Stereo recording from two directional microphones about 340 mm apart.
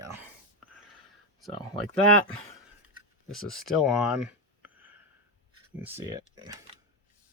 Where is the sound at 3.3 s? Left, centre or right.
Centre.